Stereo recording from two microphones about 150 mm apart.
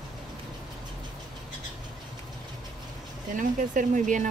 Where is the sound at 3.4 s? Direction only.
60° right (ahead or behind).